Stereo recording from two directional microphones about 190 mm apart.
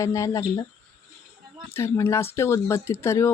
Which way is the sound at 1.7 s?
15° left (ahead or behind).